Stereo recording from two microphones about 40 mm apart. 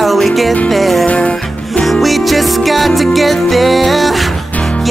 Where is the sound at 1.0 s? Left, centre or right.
Left.